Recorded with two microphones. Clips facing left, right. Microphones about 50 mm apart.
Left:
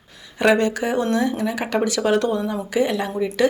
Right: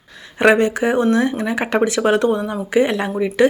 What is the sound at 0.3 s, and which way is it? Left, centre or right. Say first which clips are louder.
Speech: right 4 dB; right.